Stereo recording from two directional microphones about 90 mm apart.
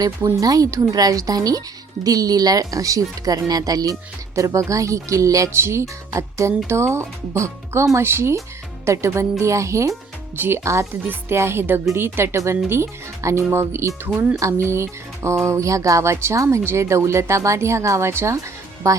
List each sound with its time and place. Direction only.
0.3 s speech: 40° right (ahead or behind)